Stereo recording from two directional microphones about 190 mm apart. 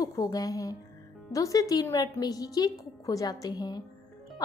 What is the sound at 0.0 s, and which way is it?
A woman's voice, 20° left (ahead or behind).